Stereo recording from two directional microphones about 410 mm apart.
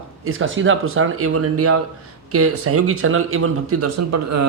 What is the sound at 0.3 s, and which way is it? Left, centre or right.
Speech, right.